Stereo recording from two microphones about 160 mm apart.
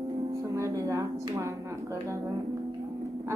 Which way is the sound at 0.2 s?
20° right (ahead or behind).